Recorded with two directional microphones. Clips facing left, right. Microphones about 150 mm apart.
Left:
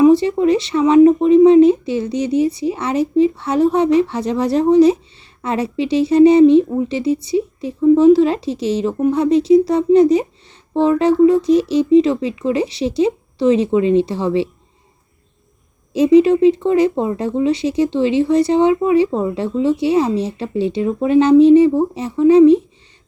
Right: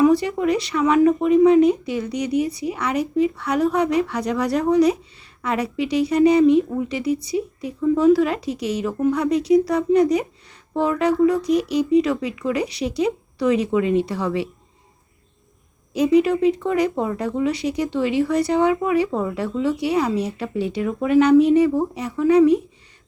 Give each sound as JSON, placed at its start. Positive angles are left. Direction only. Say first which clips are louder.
{"t": 0.0, "sound": "speech", "louder": "left 5 dB", "side_deg": 25}
{"t": 15.9, "sound": "speech", "louder": "left 6 dB", "side_deg": 25}